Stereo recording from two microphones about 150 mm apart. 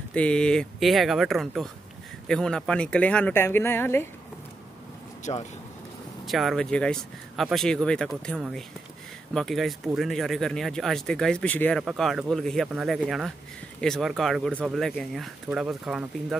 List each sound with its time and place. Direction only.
0.1 s speech: 5° left (ahead or behind)
5.2 s speech: 50° left (ahead or behind)
6.2 s speech: centre (ahead or behind)
11.8 s speech: 5° right (ahead or behind)